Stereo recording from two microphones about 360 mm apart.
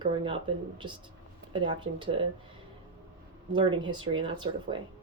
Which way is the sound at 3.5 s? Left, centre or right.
Centre.